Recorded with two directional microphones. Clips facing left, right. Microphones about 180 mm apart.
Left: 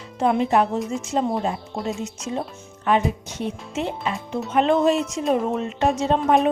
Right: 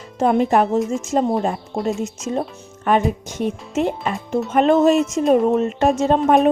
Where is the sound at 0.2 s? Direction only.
45° right (ahead or behind).